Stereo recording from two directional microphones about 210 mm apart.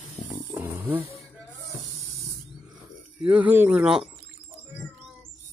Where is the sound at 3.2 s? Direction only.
10° right (ahead or behind).